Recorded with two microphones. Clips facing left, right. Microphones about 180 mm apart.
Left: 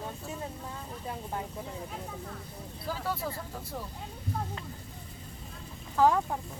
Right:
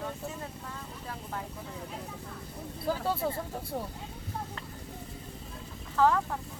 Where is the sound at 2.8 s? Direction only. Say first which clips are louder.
Right 4 dB; 25° right (ahead or behind).